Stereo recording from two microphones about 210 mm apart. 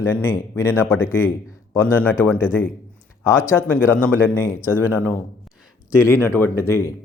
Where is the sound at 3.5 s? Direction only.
10° left (ahead or behind).